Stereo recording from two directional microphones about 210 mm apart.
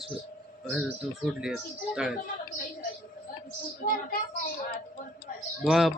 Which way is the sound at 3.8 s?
35° left (ahead or behind).